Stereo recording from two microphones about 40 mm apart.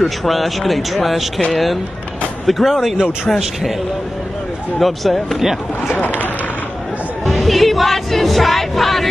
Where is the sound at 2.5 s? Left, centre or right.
Centre.